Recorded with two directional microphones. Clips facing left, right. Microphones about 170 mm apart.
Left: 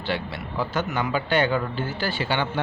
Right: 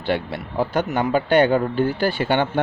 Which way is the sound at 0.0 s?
50° right (ahead or behind).